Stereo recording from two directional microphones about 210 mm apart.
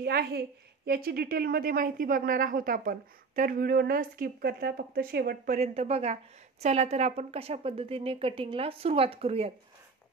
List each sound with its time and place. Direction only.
0.0 s a woman's voice: 50° right (ahead or behind)
5.6 s speech: 30° right (ahead or behind)